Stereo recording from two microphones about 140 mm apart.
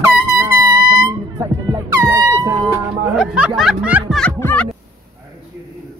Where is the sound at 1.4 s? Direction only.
20° right (ahead or behind).